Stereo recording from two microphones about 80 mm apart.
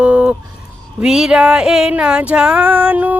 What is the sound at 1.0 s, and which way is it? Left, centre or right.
Female singing, centre.